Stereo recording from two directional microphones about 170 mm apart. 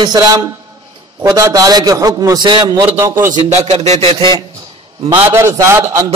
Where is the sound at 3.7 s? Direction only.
35° right (ahead or behind).